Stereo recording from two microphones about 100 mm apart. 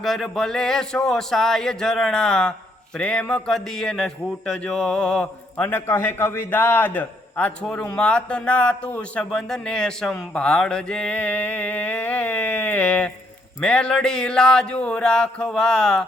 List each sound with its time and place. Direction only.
0.0 s speech: 5° left (ahead or behind)